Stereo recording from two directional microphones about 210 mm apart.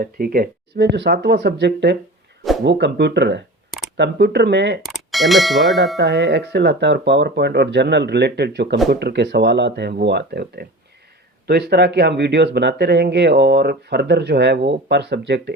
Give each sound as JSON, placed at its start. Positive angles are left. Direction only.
{"t": 0.0, "sound": "speech", "side_deg": -45}
{"t": 4.8, "sound": "bell", "side_deg": 0}
{"t": 6.0, "sound": "speech", "side_deg": -50}
{"t": 11.7, "sound": "speech", "side_deg": -50}